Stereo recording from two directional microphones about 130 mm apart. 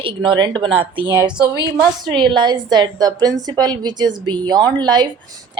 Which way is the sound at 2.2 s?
35° right (ahead or behind).